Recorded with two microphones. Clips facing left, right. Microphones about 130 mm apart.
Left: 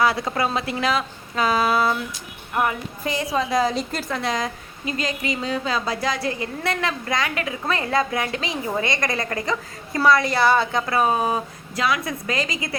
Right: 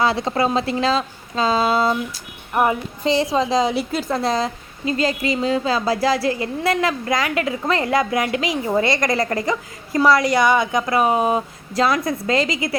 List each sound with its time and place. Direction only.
0.0 s a woman's voice: 25° right (ahead or behind)
4.1 s a woman's voice: 35° right (ahead or behind)
8.3 s a woman's voice: 25° left (ahead or behind)
9.0 s a woman's voice: 25° right (ahead or behind)
11.7 s a woman's voice: 35° right (ahead or behind)